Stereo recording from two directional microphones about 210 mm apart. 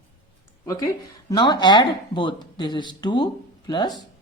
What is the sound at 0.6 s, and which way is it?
A woman's voice, 15° left (ahead or behind).